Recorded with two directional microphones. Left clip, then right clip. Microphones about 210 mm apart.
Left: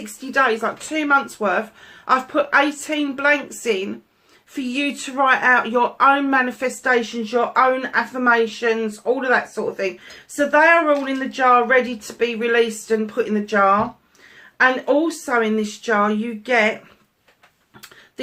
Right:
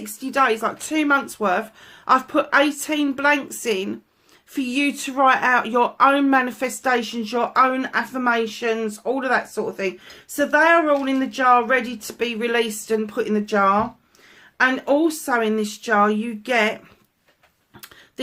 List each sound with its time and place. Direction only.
0.0 s speech: 45° right (ahead or behind)